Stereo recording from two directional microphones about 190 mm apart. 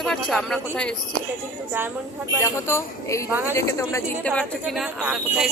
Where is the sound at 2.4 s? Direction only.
15° left (ahead or behind).